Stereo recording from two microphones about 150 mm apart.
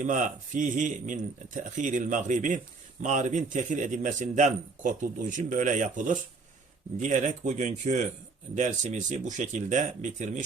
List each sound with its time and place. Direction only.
0.0 s speech: 55° right (ahead or behind)